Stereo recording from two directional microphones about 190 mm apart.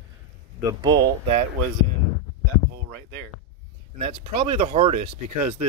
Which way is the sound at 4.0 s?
30° right (ahead or behind).